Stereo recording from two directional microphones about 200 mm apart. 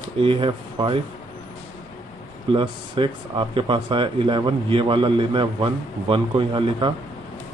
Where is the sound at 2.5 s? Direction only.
25° right (ahead or behind).